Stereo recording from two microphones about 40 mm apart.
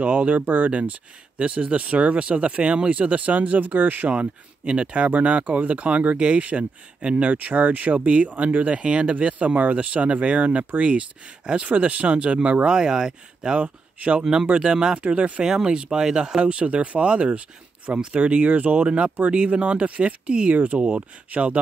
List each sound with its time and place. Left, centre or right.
0.0 s speech: right
4.1 s speech: right
13.6 s speech: right
14.2 s speech: right
15.0 s speech: right
15.4 s speech: centre
20.5 s speech: right